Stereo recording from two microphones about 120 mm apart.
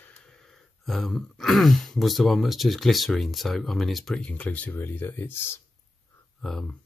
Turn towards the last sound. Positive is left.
turn(degrees=5)  # may be behind; listen again after turning